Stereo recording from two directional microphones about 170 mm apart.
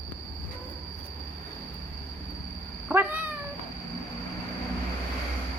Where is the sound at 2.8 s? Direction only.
10° right (ahead or behind).